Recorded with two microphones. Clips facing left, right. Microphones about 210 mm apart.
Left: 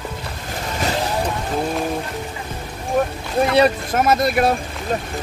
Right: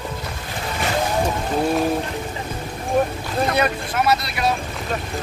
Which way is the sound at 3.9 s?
50° left (ahead or behind).